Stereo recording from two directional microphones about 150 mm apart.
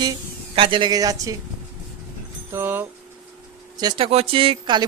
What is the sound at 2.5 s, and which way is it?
Speech, 15° right (ahead or behind).